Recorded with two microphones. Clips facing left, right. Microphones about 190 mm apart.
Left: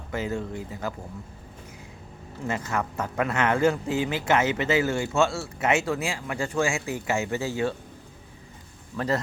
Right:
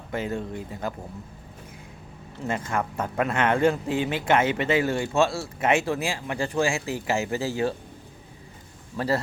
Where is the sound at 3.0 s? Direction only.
20° right (ahead or behind).